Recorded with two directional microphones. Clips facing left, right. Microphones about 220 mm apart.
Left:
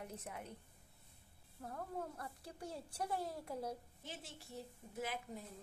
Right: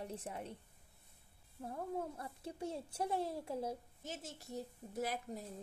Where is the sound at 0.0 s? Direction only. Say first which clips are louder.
Right 4 dB; 30° right (ahead or behind).